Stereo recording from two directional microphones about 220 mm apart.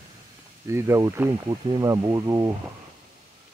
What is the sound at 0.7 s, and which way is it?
Speech, 10° right (ahead or behind).